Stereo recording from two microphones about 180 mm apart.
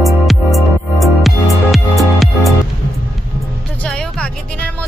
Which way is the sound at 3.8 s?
5° left (ahead or behind).